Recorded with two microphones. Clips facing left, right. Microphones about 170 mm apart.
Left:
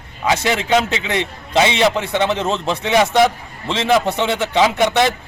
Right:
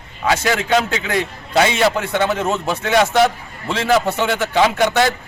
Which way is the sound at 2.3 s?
5° right (ahead or behind).